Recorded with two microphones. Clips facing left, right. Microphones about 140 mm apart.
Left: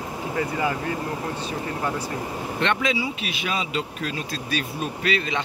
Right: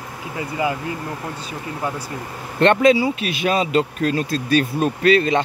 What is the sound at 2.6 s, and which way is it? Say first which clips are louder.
Speech: right 11 dB; 45° right (ahead or behind).